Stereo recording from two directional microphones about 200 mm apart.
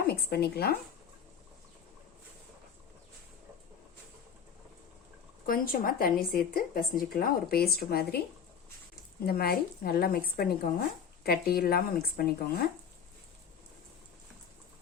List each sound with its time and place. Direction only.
0.1 s speech: 50° left (ahead or behind)
5.5 s speech: 45° left (ahead or behind)
9.2 s speech: 50° left (ahead or behind)